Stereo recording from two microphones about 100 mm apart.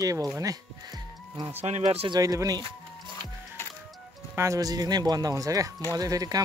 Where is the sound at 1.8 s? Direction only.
90° right.